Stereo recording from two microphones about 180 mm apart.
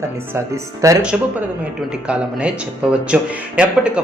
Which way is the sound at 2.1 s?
5° right (ahead or behind).